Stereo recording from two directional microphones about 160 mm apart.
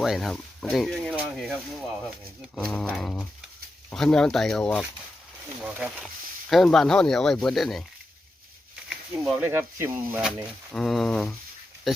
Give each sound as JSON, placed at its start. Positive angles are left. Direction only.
{"t": 0.0, "sound": "speech", "side_deg": 0}
{"t": 2.6, "sound": "speech", "side_deg": 0}
{"t": 5.6, "sound": "speech", "side_deg": -5}
{"t": 8.9, "sound": "a sound", "side_deg": -5}
{"t": 9.5, "sound": "speech", "side_deg": -15}
{"t": 10.7, "sound": "speech", "side_deg": 5}